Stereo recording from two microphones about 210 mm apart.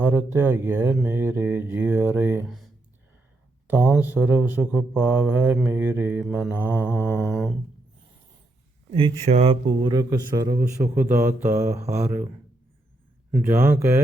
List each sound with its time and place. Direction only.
0.0 s speech: 10° right (ahead or behind)
3.7 s speech: 10° right (ahead or behind)
7.3 s a sound: centre (ahead or behind)
8.9 s a man's voice: 25° right (ahead or behind); by 12.3 s 10° right (ahead or behind)
13.4 s speech: 10° right (ahead or behind)